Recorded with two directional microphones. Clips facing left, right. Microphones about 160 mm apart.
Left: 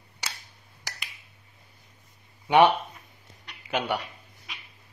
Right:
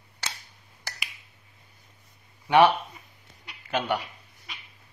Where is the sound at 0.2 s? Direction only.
10° left (ahead or behind).